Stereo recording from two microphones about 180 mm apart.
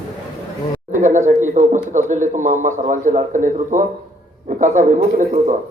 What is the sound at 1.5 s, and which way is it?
A man's voice, 45° right (ahead or behind).